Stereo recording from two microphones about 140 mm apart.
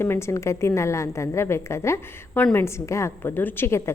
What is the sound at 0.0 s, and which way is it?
A woman's voice, 20° left (ahead or behind).